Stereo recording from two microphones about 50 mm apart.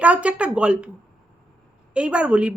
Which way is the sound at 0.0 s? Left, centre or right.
Right.